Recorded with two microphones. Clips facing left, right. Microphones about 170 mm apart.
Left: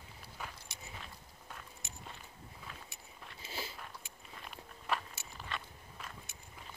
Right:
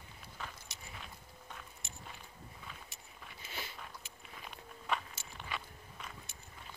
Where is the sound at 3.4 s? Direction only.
30° left (ahead or behind).